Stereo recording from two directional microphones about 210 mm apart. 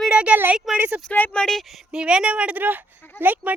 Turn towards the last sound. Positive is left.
turn(degrees=-10)  # may be behind; listen again after turning